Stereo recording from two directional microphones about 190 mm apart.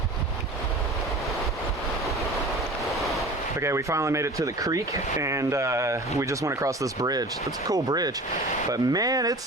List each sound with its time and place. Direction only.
3.0 s waves: centre (ahead or behind)
3.6 s speech: 15° right (ahead or behind)